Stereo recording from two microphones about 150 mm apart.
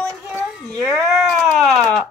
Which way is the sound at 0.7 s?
20° right (ahead or behind).